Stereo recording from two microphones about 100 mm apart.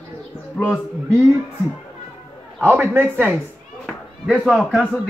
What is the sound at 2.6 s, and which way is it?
Speech, 20° right (ahead or behind).